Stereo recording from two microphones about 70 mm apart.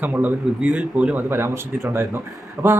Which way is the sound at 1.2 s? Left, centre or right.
Right.